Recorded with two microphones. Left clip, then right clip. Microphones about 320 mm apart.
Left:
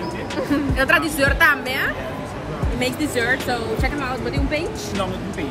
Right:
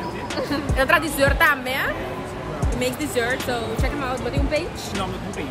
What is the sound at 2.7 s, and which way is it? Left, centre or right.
Speech, centre.